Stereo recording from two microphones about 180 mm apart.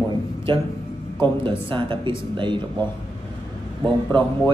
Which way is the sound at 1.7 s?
25° right (ahead or behind).